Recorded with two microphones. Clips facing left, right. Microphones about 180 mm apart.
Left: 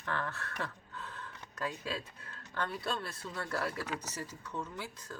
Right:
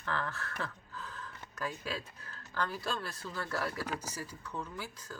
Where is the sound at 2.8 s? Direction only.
25° left (ahead or behind).